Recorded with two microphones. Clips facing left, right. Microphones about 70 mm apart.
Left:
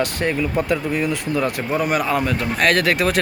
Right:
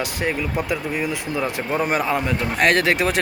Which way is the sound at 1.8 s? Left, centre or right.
Right.